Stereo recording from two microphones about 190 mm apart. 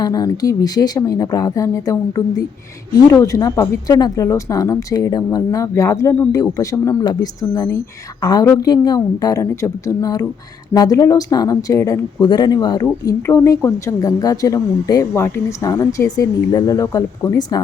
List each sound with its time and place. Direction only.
0.0 s speech: 20° left (ahead or behind)